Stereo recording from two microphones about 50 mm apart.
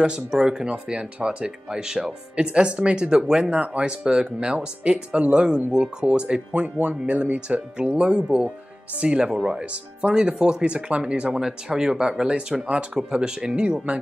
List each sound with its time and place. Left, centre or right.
0.0 s speech: centre
11.2 s speech: centre